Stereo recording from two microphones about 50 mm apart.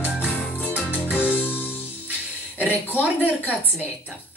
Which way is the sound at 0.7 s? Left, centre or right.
Left.